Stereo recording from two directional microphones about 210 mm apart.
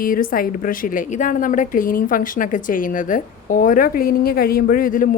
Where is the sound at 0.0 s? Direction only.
40° left (ahead or behind).